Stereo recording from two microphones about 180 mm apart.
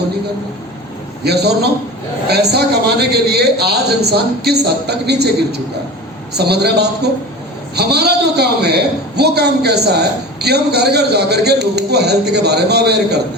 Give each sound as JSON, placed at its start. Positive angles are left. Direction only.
{"t": 1.2, "sound": "a man's voice", "side_deg": -65}